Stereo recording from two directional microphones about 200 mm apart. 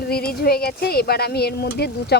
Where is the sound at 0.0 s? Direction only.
50° left (ahead or behind).